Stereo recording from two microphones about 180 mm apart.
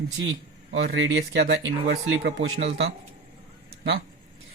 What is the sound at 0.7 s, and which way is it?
Speech, 85° right.